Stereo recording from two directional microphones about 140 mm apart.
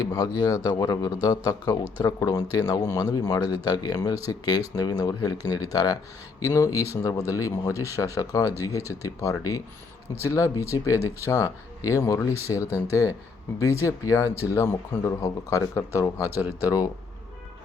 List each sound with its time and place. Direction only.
0.0 s speech: 30° left (ahead or behind)
16.3 s speech: 15° right (ahead or behind)